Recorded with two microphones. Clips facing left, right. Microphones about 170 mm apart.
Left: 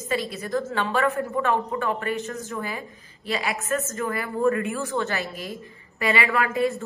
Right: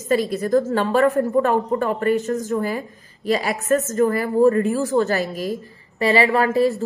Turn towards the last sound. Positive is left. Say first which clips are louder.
# right 6 dB
turn(degrees=-35)  # may be behind; listen again after turning